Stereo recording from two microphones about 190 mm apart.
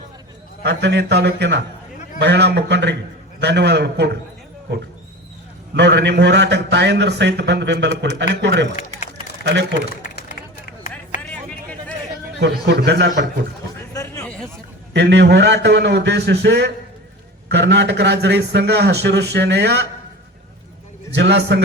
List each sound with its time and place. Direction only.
0.6 s a man's voice: 65° right (ahead or behind)
5.7 s a man's voice: 65° right (ahead or behind)
9.9 s run: 45° left (ahead or behind)
11.2 s a sound: 5° left (ahead or behind)
12.4 s a man's voice: 60° right (ahead or behind)
13.9 s a sound: 15° left (ahead or behind)
14.9 s a man's voice: 65° right (ahead or behind)
21.1 s a man's voice: 65° right (ahead or behind)